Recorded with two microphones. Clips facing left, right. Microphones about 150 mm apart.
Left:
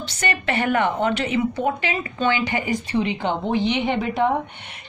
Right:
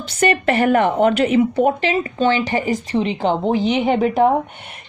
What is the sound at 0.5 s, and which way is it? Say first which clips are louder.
A woman's voice: right 3 dB; 40° right (ahead or behind).